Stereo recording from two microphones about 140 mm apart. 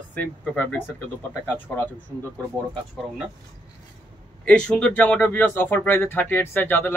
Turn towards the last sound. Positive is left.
turn(degrees=15)  # may be behind; listen again after turning